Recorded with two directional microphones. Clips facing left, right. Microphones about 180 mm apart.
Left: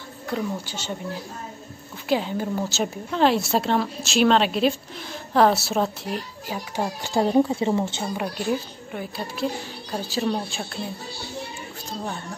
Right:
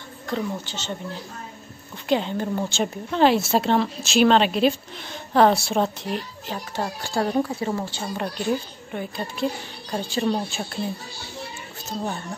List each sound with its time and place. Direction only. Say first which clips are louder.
0.3 s a woman's voice: even; 10° left (ahead or behind)
6.7 s speech: left 2 dB; 15° left (ahead or behind)
8.2 s a woman's voice: right 1 dB; 5° left (ahead or behind)